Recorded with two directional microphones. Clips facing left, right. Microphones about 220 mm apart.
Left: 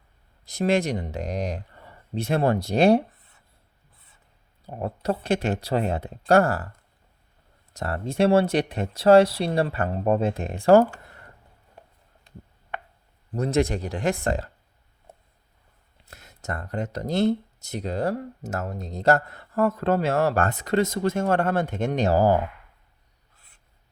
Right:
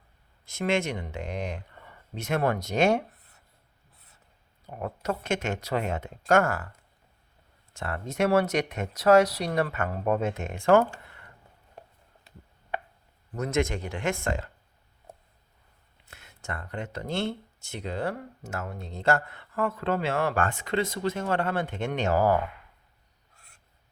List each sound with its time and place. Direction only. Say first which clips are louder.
0.4 s speech: left 4 dB; 35° left (ahead or behind)
4.6 s speech: left 4 dB; 30° left (ahead or behind)
7.7 s speech: left 5 dB; 40° left (ahead or behind)
12.3 s a sound: left 7 dB; 5° right (ahead or behind)
13.3 s speech: left 4 dB; 35° left (ahead or behind)
16.0 s speech: left 5 dB; 40° left (ahead or behind)